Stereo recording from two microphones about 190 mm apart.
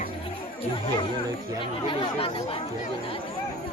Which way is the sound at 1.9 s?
30° left (ahead or behind).